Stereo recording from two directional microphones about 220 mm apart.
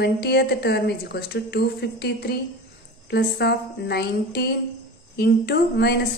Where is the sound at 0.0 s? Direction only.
45° left (ahead or behind).